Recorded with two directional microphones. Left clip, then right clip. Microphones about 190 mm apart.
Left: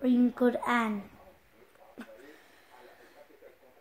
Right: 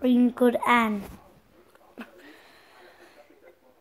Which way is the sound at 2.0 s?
25° right (ahead or behind).